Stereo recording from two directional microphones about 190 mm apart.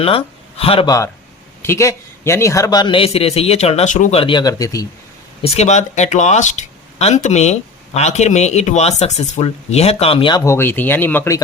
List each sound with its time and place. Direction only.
0.0 s speech: 30° left (ahead or behind)
1.6 s a man's voice: 15° left (ahead or behind); by 4.2 s 40° left (ahead or behind)
4.2 s a man's voice: 25° left (ahead or behind)
5.4 s speech: 35° left (ahead or behind); by 11.4 s 15° left (ahead or behind)